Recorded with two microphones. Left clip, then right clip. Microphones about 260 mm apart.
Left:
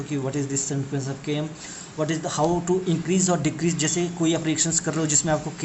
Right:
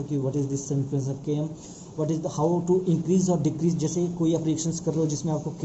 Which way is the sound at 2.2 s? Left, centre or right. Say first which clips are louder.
Left 1 dB; left.